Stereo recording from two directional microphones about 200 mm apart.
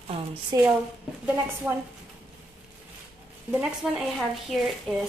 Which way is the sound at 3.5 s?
5° right (ahead or behind).